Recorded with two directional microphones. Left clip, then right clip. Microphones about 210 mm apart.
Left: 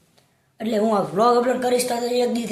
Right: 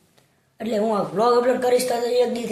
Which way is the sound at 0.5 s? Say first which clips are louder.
Left 1 dB; 10° left (ahead or behind).